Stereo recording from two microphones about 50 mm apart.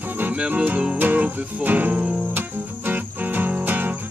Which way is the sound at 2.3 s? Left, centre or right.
Right.